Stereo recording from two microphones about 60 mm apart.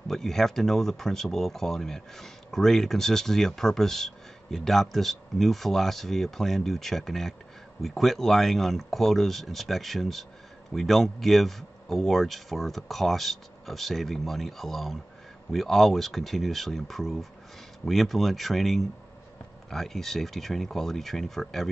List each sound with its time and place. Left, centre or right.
0.1 s speech: centre